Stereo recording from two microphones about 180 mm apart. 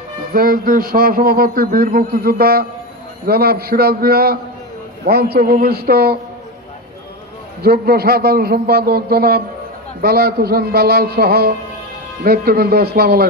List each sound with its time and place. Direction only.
0.3 s a man's voice: 50° right (ahead or behind)
7.6 s a man's voice: 60° right (ahead or behind)